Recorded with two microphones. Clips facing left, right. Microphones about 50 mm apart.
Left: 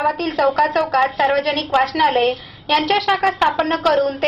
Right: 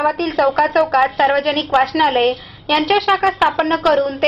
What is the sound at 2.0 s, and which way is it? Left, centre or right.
Speech, right.